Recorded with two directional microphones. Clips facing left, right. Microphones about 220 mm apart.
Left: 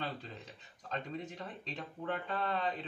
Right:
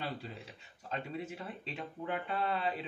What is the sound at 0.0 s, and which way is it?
Speech, 10° right (ahead or behind).